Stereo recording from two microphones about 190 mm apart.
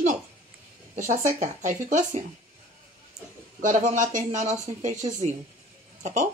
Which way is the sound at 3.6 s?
40° right (ahead or behind).